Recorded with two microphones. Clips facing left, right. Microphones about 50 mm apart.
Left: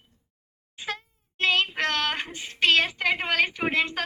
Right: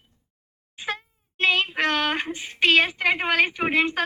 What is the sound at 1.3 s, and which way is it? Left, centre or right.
Child singing, centre.